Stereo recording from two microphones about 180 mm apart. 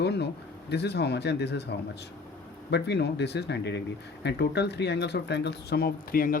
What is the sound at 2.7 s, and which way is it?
Speech, 70° left (ahead or behind).